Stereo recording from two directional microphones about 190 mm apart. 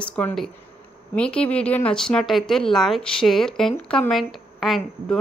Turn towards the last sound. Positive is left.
turn(degrees=0)  # may be behind; listen again after turning